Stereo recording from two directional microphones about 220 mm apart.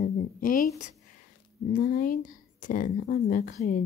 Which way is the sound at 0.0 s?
40° left (ahead or behind).